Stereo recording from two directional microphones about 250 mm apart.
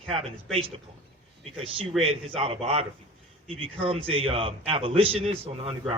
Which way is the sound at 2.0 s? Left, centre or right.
Right.